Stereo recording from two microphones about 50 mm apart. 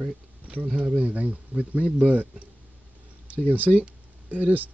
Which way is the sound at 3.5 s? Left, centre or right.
Right.